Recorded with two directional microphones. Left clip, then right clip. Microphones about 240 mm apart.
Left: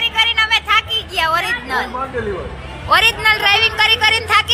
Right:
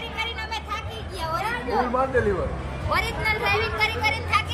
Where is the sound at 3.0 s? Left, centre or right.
Centre.